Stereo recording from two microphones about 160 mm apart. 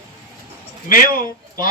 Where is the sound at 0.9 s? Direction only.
60° left (ahead or behind).